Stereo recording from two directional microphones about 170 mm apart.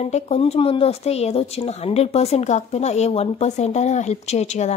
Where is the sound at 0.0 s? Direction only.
40° left (ahead or behind).